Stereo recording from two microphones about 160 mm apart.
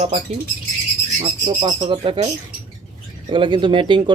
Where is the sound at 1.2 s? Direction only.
40° right (ahead or behind).